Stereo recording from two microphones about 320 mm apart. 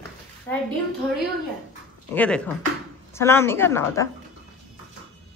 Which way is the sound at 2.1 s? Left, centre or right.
Centre.